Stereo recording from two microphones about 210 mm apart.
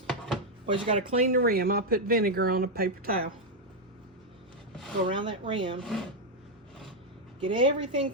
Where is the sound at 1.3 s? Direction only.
45° right (ahead or behind).